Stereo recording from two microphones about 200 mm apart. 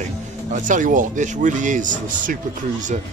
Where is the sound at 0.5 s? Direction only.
40° right (ahead or behind).